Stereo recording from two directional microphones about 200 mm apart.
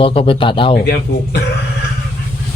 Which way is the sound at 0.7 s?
55° left (ahead or behind).